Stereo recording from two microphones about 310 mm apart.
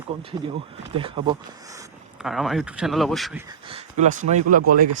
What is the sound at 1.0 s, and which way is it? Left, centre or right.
Speech, centre.